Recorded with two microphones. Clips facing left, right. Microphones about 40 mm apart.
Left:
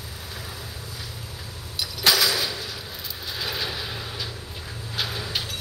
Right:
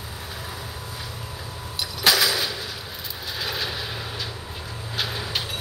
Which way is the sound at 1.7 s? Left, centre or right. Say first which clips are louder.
Right 1 dB; centre.